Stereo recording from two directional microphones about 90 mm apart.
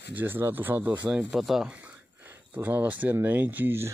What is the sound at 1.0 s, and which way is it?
Speech, 5° right (ahead or behind).